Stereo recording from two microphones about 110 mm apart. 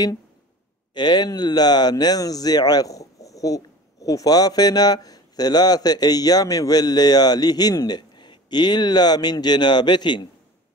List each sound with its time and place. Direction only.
0.9 s speech: 40° left (ahead or behind)